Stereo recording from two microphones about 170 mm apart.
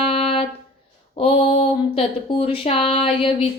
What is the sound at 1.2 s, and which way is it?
Speech, 35° left (ahead or behind).